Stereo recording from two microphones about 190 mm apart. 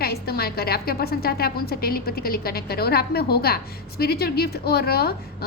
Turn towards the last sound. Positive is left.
turn(degrees=55)  # may be behind; listen again after turning